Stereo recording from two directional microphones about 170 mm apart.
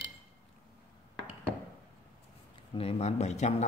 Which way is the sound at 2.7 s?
35° left (ahead or behind).